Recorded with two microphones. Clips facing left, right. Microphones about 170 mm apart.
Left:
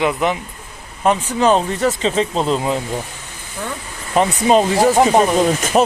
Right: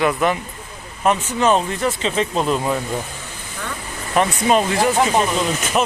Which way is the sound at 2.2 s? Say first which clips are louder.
Left 2 dB; 25° left (ahead or behind).